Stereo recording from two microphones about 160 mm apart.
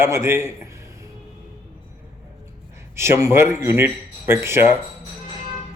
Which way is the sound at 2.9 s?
15° right (ahead or behind).